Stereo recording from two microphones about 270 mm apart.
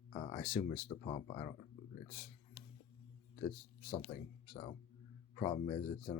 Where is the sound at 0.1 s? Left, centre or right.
Centre.